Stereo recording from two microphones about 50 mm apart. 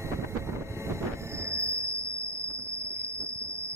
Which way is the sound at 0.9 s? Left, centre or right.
Right.